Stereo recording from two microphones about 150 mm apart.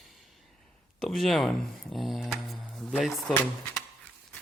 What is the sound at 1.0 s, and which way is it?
Speech, centre (ahead or behind).